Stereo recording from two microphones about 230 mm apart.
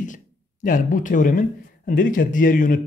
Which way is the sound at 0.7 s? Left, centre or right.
Left.